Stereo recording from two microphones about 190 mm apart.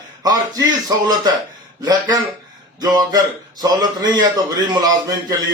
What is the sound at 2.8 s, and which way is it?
A man's voice, 20° right (ahead or behind).